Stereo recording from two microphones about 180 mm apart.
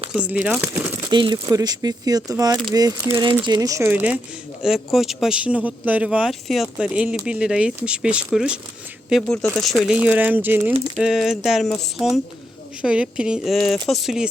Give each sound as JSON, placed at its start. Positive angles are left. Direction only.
{"t": 0.1, "sound": "speech", "side_deg": -5}
{"t": 1.1, "sound": "speech", "side_deg": -25}